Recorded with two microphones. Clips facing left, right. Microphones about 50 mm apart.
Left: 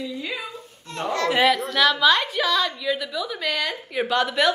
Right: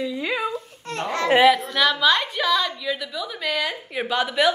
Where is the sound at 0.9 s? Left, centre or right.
Right.